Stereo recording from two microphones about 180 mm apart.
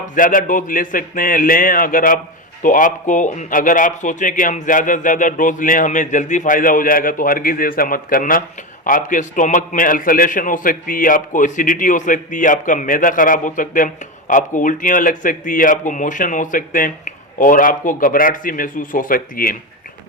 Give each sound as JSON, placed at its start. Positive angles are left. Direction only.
{"t": 0.1, "sound": "a man's voice", "side_deg": 50}